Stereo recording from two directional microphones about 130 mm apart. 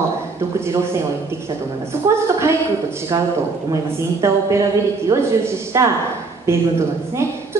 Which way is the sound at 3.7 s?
20° right (ahead or behind).